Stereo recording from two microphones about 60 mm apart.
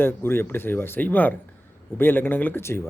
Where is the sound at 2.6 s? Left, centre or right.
Left.